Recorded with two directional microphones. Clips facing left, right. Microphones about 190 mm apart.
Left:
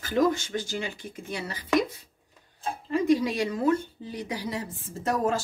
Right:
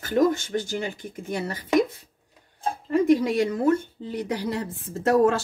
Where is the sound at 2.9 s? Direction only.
55° right (ahead or behind).